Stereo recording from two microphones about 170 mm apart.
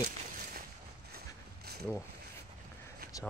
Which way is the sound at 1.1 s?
65° right (ahead or behind).